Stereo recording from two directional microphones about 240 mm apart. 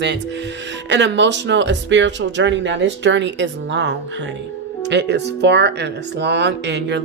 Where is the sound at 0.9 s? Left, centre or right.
Right.